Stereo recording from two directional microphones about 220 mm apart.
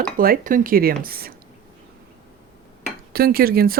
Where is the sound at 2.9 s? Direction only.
40° right (ahead or behind).